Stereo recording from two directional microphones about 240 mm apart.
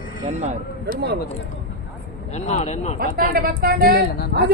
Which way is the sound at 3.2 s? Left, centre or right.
Right.